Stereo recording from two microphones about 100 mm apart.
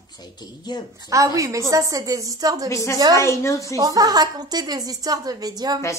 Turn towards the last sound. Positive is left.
turn(degrees=-40)  # may be behind; listen again after turning